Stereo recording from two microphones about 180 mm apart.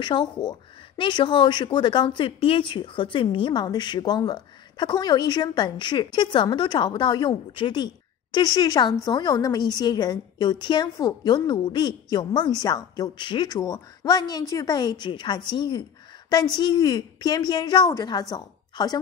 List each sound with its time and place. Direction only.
0.0 s a woman's voice: 25° left (ahead or behind)